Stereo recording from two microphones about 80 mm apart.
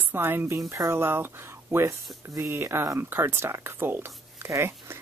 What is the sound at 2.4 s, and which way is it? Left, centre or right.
Speech, right.